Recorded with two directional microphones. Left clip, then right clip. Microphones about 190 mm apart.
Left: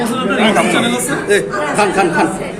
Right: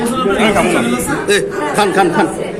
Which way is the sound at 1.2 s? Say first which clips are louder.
Left 1 dB; 40° right (ahead or behind).